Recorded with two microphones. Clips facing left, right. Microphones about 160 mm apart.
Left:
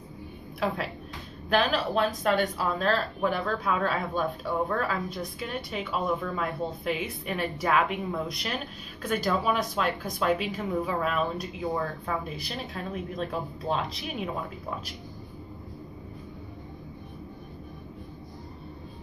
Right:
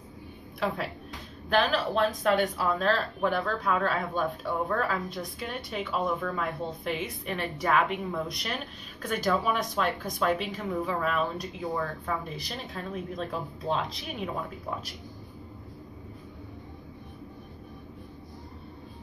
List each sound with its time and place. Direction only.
0.6 s a woman's voice: centre (ahead or behind)